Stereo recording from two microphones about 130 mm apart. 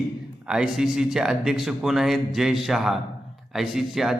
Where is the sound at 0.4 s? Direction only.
5° right (ahead or behind).